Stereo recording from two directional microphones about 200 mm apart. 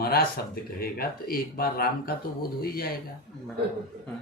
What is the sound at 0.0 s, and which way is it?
Speech, 50° left (ahead or behind).